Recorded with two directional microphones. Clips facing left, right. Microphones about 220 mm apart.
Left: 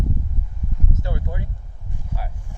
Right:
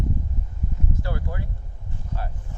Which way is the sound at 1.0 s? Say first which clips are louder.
Left 1 dB; 20° left (ahead or behind).